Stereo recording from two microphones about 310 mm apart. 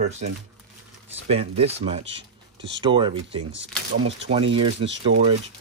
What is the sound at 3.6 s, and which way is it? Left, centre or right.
Speech, right.